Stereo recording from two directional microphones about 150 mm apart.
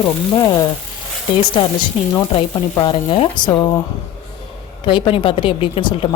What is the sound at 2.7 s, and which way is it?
Speech, 35° left (ahead or behind).